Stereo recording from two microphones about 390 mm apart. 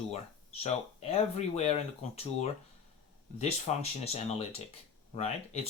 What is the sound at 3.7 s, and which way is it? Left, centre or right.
Speech, centre.